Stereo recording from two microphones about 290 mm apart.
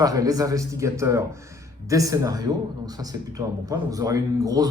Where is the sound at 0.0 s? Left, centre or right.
Centre.